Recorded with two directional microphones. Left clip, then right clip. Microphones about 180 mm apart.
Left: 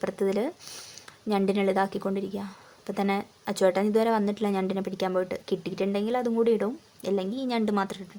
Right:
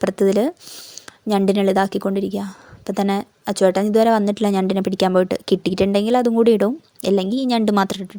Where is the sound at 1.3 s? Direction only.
35° right (ahead or behind).